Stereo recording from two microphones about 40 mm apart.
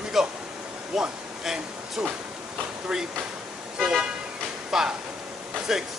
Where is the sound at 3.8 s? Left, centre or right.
Centre.